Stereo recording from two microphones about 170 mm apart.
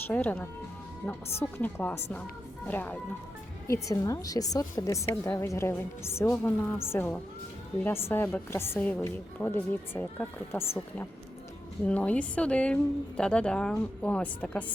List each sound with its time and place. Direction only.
0.1 s a woman's voice: 10° left (ahead or behind)